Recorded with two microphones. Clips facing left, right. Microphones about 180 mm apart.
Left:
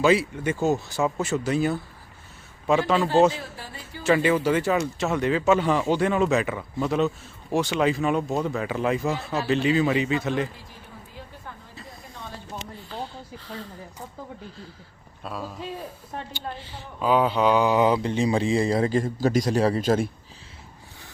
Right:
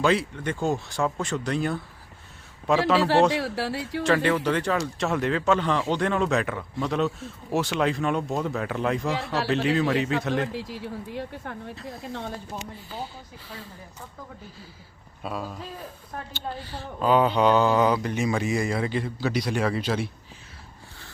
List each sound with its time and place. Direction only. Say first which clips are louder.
0.0 s speech: left 3 dB; 5° left (ahead or behind)
3.3 s speech: right 10 dB; 85° right
4.0 s speech: left 2 dB; 5° left (ahead or behind)
9.1 s speech: right 1 dB; 85° right
9.5 s speech: left 2 dB; centre (ahead or behind)
10.5 s speech: right 12 dB; 80° right
15.2 s speech: right 2 dB; centre (ahead or behind)
16.6 s speech: right 4 dB; 20° left (ahead or behind)
17.0 s speech: right 1 dB; 5° left (ahead or behind); by 20.1 s 45° left (ahead or behind)